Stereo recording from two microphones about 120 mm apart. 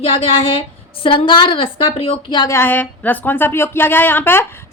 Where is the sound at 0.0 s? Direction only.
50° left (ahead or behind).